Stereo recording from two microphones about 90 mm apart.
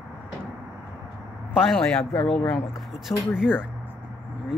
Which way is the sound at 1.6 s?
5° left (ahead or behind).